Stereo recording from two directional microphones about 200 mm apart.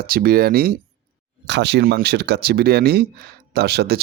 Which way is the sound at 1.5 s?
60° right (ahead or behind).